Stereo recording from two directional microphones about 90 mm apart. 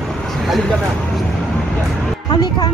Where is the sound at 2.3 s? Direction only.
55° left (ahead or behind).